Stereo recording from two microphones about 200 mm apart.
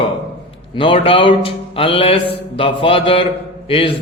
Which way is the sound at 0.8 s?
25° left (ahead or behind).